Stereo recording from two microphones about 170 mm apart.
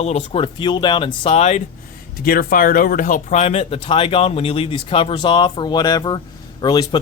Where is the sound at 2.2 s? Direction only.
60° left (ahead or behind).